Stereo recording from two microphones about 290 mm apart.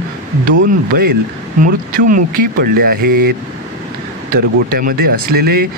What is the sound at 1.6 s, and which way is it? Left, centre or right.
Speech, right.